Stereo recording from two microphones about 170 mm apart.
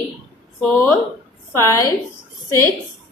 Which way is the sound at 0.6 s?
10° left (ahead or behind).